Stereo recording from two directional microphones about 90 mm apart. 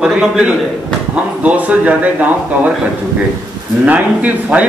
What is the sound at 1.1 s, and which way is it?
Speech, 15° right (ahead or behind).